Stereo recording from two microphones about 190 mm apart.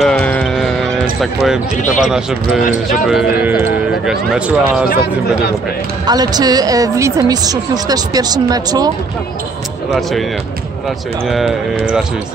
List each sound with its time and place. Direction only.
0.0 s music: 5° left (ahead or behind)
1.2 s speech: centre (ahead or behind)
6.0 s speech: 20° right (ahead or behind)
11.2 s speech: centre (ahead or behind)